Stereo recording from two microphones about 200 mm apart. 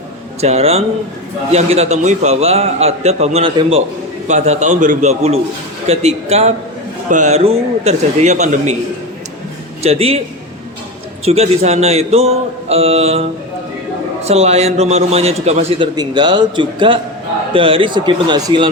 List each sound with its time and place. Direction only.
0.4 s a man's voice: 30° right (ahead or behind)
9.8 s a man's voice: 30° right (ahead or behind)
11.3 s a man's voice: 30° right (ahead or behind)
14.3 s a man's voice: 30° right (ahead or behind)